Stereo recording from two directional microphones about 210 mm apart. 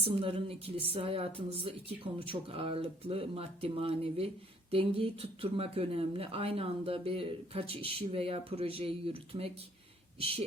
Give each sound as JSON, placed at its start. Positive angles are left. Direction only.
{"t": 0.0, "sound": "speech", "side_deg": -25}